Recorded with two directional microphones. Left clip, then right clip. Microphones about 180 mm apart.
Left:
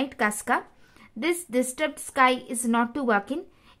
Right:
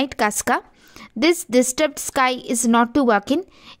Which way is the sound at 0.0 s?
45° right (ahead or behind).